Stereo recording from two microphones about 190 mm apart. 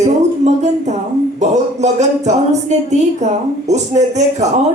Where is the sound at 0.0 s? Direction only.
35° right (ahead or behind).